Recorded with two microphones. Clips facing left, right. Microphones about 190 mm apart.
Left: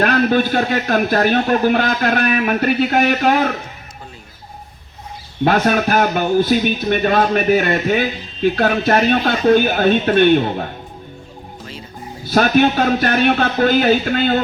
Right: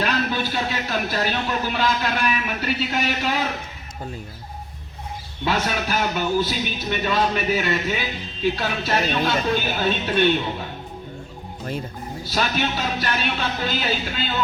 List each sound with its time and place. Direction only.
0.0 s a man's voice: 55° left (ahead or behind)
5.5 s a man's voice: 55° left (ahead or behind)
12.2 s a man's voice: 55° left (ahead or behind)